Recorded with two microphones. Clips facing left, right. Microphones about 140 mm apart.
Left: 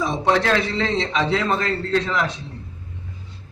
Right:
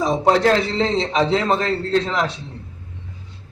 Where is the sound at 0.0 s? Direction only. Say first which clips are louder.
Right 4 dB; 30° right (ahead or behind).